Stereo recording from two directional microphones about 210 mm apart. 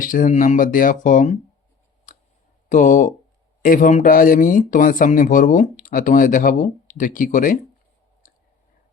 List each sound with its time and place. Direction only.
0.0 s speech: 40° left (ahead or behind)
2.6 s speech: 35° left (ahead or behind)
8.2 s clicking: 40° left (ahead or behind)